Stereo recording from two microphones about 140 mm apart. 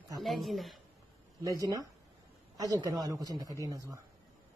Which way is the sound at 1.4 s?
25° right (ahead or behind).